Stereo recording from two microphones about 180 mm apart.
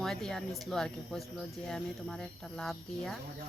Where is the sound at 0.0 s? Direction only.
5° left (ahead or behind).